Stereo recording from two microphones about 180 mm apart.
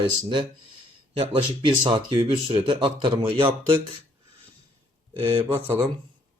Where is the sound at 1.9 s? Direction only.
30° right (ahead or behind).